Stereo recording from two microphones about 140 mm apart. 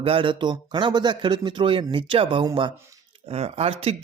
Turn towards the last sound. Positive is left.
turn(degrees=-45)  # may be behind; listen again after turning